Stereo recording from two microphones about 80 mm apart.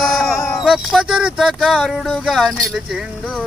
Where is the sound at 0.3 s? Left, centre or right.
Left.